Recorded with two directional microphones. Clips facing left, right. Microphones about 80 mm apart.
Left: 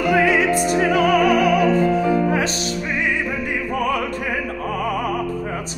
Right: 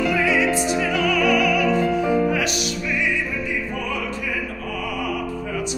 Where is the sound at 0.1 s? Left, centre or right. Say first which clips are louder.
Left 3 dB; left.